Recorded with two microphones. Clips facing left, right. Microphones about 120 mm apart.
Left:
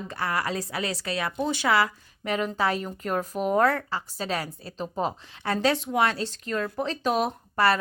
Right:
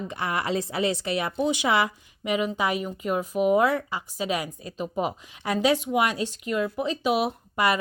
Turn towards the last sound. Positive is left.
turn(degrees=-15)  # may be behind; listen again after turning